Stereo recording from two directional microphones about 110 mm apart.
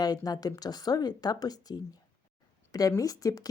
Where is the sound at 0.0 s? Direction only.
35° left (ahead or behind).